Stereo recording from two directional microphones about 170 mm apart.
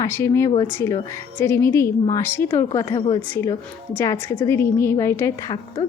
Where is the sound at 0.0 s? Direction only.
15° left (ahead or behind).